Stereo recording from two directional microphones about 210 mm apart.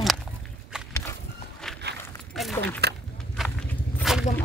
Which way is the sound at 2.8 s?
50° right (ahead or behind).